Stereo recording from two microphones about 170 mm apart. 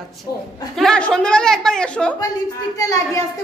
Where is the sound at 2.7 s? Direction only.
20° left (ahead or behind).